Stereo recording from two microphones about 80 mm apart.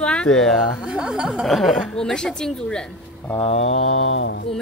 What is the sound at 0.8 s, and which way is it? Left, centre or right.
Speech, centre.